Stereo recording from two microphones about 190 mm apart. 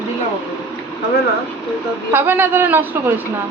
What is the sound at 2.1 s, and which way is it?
A man's voice, 10° right (ahead or behind).